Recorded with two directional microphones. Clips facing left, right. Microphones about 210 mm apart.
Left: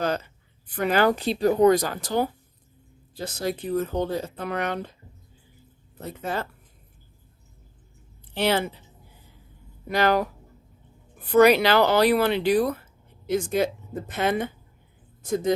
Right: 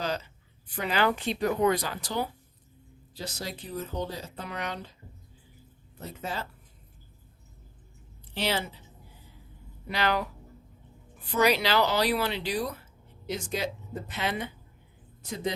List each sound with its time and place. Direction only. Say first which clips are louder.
0.0 s a sound: left 6 dB; 55° left (ahead or behind)
0.8 s speech: left 6 dB; 50° left (ahead or behind)
6.2 s speech: left 6 dB; 55° left (ahead or behind)
8.3 s speech: left 7 dB; 55° left (ahead or behind)
9.9 s speech: left 7 dB; 45° left (ahead or behind)